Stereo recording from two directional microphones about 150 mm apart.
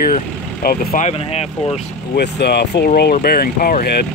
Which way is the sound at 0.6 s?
80° left.